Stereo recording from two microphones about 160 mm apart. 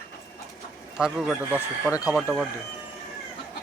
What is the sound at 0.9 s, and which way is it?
Speech, 5° right (ahead or behind).